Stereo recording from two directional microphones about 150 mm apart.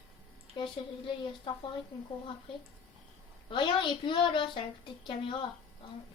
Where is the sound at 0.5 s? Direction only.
35° left (ahead or behind).